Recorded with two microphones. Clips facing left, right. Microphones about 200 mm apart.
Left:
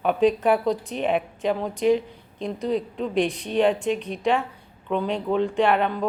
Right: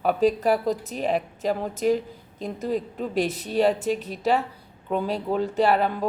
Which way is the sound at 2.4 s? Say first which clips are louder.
Left 2 dB; 5° right (ahead or behind).